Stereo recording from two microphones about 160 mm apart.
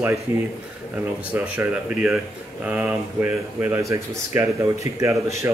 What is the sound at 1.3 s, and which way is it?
Speech, 10° right (ahead or behind).